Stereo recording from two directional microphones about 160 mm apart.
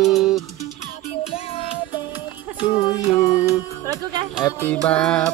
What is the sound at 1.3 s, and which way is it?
Music, 35° left (ahead or behind).